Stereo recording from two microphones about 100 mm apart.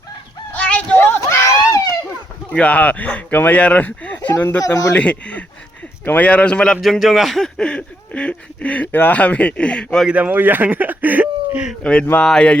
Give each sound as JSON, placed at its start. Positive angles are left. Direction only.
{"t": 0.5, "sound": "a sound", "side_deg": 15}
{"t": 2.5, "sound": "speech", "side_deg": 15}
{"t": 4.6, "sound": "speech", "side_deg": 35}
{"t": 4.9, "sound": "speech", "side_deg": 15}
{"t": 10.1, "sound": "speech", "side_deg": -15}
{"t": 11.8, "sound": "speech", "side_deg": 10}